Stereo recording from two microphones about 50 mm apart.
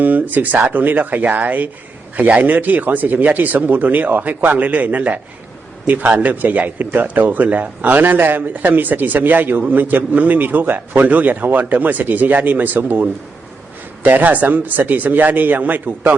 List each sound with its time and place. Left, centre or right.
0.0 s speech: right